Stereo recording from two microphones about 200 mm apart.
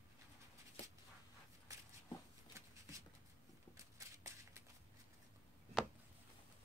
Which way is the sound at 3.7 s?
15° right (ahead or behind).